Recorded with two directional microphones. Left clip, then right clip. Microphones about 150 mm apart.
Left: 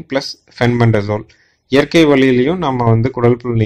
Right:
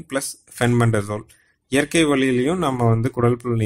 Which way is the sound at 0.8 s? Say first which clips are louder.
Left 7 dB; 15° right (ahead or behind).